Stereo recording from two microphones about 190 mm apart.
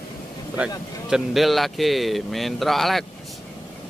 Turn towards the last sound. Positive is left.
turn(degrees=0)  # may be behind; listen again after turning